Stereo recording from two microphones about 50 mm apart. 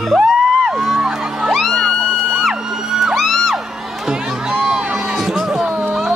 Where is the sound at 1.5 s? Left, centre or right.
Centre.